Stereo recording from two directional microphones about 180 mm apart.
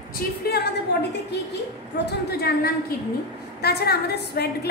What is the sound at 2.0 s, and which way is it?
A woman's voice, 60° left (ahead or behind).